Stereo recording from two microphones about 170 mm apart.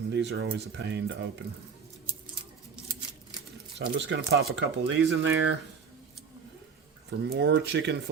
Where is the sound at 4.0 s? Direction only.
90° right.